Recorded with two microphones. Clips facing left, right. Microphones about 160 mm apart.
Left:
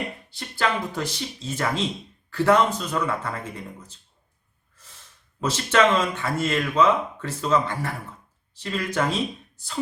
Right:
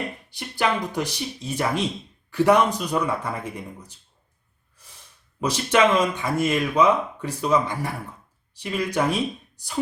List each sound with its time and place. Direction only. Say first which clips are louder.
0.3 s speech: right 2 dB; 15° right (ahead or behind)